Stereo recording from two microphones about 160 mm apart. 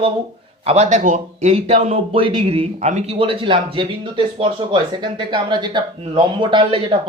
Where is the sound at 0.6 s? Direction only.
45° right (ahead or behind).